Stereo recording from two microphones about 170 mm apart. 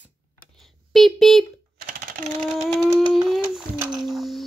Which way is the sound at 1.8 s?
60° right (ahead or behind).